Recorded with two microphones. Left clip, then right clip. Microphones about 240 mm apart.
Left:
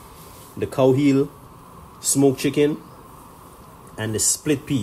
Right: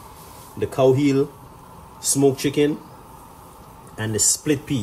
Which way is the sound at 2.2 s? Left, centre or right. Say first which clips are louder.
Even; left.